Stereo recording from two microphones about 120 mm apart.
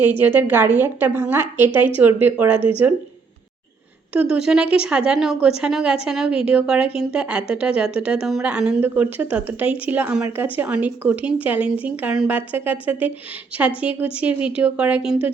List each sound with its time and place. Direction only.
0.0 s a woman's voice: 15° right (ahead or behind)
4.1 s a woman's voice: 5° right (ahead or behind)